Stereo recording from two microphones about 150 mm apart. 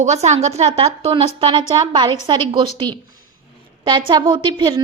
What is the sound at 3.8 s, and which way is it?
A woman's voice, 35° right (ahead or behind).